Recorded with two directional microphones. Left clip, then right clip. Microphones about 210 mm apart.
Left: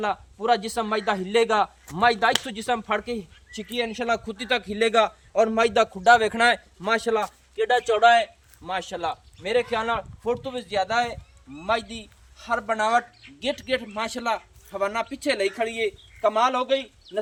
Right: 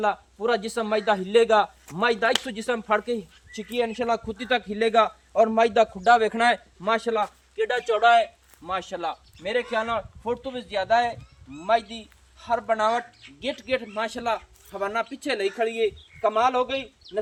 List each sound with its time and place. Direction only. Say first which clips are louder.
0.0 s a man's voice: right 1 dB; 35° left (ahead or behind); by 7.6 s 60° left (ahead or behind)
7.6 s a man's voice: left 3 dB; 25° left (ahead or behind)
7.9 s a man's voice: right 1 dB; 55° left (ahead or behind); by 16.9 s 40° left (ahead or behind)